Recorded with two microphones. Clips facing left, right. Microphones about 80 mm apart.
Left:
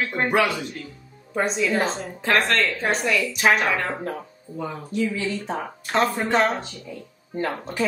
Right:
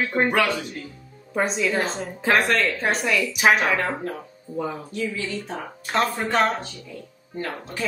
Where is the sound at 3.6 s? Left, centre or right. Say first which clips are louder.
Right 1 dB; centre.